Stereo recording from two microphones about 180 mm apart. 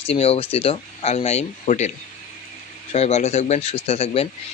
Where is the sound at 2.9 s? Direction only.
35° left (ahead or behind).